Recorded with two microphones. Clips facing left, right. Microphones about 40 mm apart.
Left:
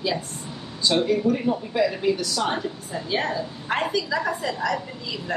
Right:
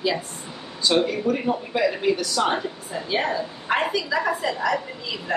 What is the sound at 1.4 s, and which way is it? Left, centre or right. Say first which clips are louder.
A man's voice: even; centre.